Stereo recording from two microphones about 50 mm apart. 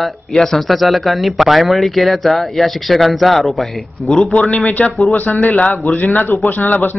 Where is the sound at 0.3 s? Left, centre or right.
Centre.